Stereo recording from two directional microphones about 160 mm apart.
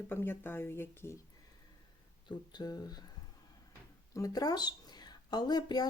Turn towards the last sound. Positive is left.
turn(degrees=25)  # may be behind; listen again after turning